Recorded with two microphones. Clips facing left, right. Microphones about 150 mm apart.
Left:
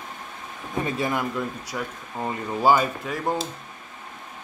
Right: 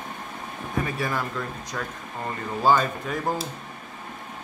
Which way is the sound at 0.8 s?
20° left (ahead or behind).